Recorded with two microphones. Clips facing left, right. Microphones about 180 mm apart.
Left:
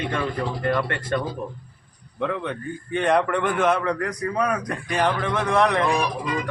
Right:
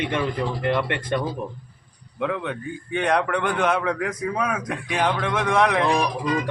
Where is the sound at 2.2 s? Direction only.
Centre (ahead or behind).